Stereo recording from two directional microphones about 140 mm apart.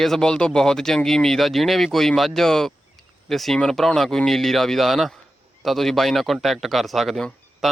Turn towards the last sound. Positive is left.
turn(degrees=0)  # may be behind; listen again after turning